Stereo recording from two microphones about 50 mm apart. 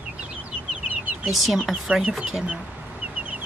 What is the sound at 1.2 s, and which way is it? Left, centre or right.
Speech, centre.